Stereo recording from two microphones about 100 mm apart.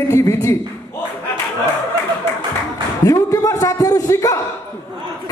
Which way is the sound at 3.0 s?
35° left (ahead or behind).